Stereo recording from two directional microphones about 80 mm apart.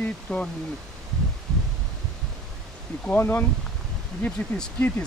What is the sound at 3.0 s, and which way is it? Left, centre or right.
Speech, left.